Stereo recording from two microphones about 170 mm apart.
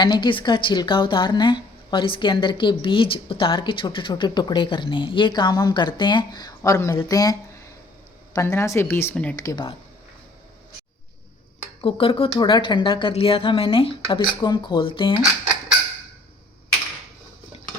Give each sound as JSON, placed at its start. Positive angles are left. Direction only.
{"t": 0.0, "sound": "a woman's voice", "side_deg": 25}
{"t": 11.8, "sound": "a woman's voice", "side_deg": 30}